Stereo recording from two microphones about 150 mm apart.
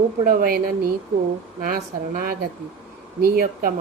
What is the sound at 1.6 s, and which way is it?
A woman's voice, 75° right (ahead or behind).